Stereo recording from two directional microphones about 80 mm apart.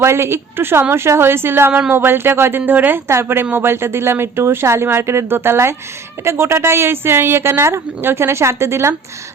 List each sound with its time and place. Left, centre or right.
0.0 s a woman's voice: right